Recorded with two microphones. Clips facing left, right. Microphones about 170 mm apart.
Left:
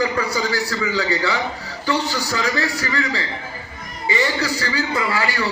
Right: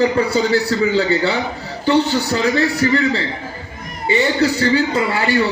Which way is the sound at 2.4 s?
25° right (ahead or behind).